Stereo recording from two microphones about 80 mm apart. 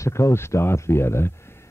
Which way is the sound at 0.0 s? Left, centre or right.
Left.